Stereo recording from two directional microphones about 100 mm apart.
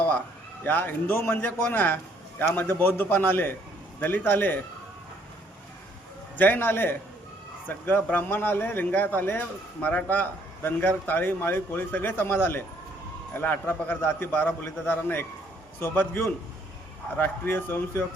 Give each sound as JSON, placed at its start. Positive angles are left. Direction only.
{"t": 0.6, "sound": "a man's voice", "side_deg": 20}
{"t": 6.3, "sound": "a man's voice", "side_deg": 20}